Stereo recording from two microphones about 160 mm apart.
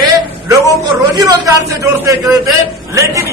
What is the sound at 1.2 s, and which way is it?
A man's voice, 20° right (ahead or behind).